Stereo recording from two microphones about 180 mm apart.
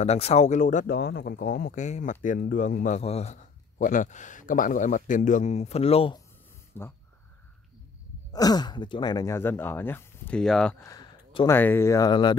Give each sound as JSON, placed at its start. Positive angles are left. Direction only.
{"t": 0.0, "sound": "speech", "side_deg": 35}
{"t": 6.7, "sound": "speech", "side_deg": 10}
{"t": 8.3, "sound": "speech", "side_deg": 20}
{"t": 10.9, "sound": "a sound", "side_deg": 20}
{"t": 11.5, "sound": "speech", "side_deg": 10}